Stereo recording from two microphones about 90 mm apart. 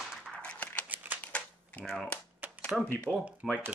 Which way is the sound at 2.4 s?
20° right (ahead or behind).